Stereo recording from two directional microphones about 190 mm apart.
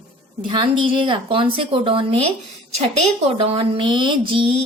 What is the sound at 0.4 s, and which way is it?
Speech, 25° right (ahead or behind).